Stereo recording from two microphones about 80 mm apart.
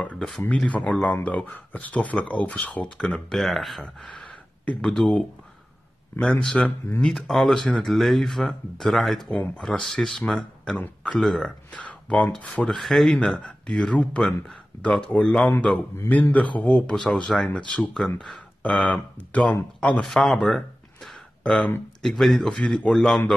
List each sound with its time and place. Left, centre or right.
0.0 s speech: centre
6.4 s speech: centre
9.3 s speech: centre
20.0 s speech: centre
22.0 s speech: centre